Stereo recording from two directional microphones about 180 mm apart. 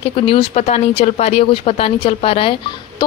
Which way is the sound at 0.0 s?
30° left (ahead or behind).